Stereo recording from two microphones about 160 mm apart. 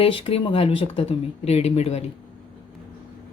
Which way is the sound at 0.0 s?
35° left (ahead or behind).